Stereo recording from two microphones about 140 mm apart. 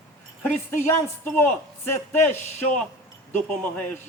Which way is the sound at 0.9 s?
15° left (ahead or behind).